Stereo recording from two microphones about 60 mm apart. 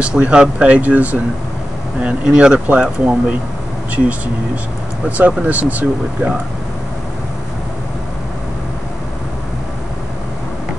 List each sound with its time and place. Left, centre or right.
0.0 s speech: centre
5.1 s speech: right